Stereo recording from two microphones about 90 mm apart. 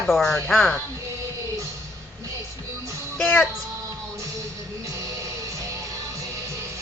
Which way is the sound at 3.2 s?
15° left (ahead or behind).